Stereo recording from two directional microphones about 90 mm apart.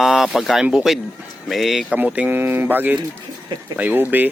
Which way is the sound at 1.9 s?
15° right (ahead or behind).